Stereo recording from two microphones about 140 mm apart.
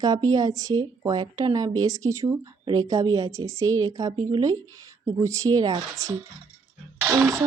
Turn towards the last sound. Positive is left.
turn(degrees=-20)  # may be behind; listen again after turning